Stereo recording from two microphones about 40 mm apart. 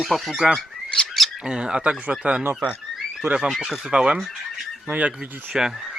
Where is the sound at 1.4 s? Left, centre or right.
Centre.